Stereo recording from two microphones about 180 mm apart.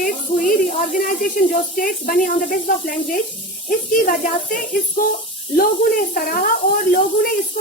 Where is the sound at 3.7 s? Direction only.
50° left (ahead or behind).